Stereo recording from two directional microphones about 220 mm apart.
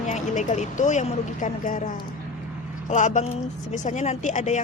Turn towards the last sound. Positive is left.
turn(degrees=35)  # may be behind; listen again after turning